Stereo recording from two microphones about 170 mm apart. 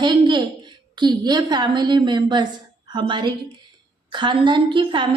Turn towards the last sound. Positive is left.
turn(degrees=-30)  # may be behind; listen again after turning